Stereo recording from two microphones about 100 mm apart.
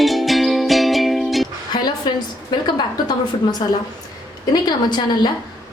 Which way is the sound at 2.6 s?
45° left (ahead or behind).